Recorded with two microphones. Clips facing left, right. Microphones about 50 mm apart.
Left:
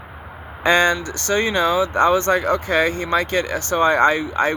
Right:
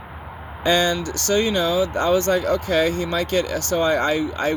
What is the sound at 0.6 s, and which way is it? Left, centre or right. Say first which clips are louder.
Speech: left 3 dB; left.